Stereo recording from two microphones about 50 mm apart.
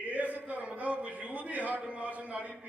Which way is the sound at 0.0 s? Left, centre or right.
Right.